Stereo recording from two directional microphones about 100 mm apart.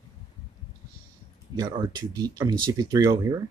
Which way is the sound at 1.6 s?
45° right (ahead or behind).